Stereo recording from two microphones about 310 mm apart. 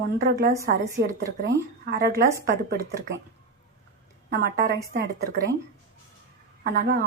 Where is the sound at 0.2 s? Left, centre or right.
Right.